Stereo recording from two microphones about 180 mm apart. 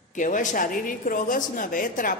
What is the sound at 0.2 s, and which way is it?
A woman's voice, 45° left (ahead or behind).